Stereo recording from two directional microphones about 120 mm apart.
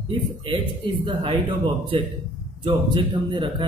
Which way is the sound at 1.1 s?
45° right (ahead or behind).